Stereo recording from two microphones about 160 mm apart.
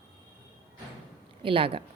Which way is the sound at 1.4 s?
35° right (ahead or behind).